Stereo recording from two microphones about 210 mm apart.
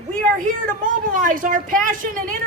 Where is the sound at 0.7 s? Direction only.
40° right (ahead or behind).